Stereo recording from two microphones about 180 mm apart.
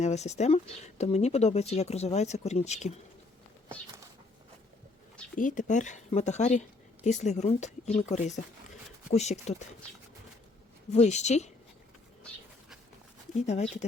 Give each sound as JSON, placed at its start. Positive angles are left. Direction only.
{"t": 0.0, "sound": "speech", "side_deg": 40}
{"t": 5.4, "sound": "speech", "side_deg": 45}
{"t": 10.9, "sound": "speech", "side_deg": 40}
{"t": 13.5, "sound": "speech", "side_deg": 35}